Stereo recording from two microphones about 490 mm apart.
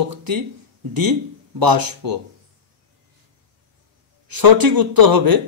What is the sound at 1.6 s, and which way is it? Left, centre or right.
Speech, right.